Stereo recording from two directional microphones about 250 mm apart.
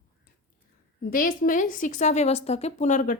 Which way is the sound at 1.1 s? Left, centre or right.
Left.